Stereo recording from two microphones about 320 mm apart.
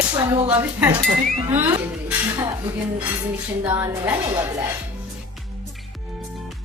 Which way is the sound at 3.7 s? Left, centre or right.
Centre.